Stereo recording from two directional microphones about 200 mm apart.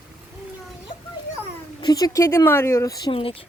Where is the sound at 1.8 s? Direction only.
20° left (ahead or behind).